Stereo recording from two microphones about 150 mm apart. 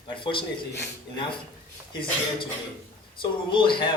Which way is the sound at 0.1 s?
35° left (ahead or behind).